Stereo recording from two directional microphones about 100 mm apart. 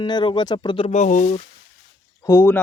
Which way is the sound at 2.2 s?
25° left (ahead or behind).